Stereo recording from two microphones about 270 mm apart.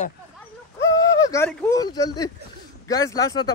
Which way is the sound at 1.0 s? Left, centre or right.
Centre.